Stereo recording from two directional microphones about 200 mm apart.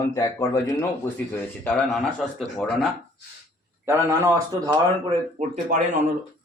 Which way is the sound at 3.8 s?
15° right (ahead or behind).